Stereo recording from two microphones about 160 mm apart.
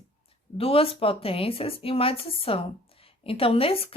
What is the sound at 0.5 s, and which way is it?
Speech, 35° left (ahead or behind).